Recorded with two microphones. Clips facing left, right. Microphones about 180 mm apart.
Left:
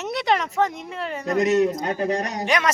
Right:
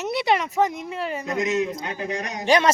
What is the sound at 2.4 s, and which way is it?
Speech, 30° right (ahead or behind).